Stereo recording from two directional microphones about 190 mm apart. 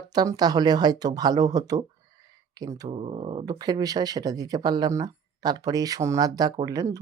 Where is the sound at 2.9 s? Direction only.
30° right (ahead or behind).